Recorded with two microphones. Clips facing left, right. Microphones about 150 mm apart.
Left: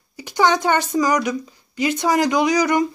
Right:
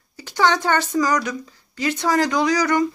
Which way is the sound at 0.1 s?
15° left (ahead or behind).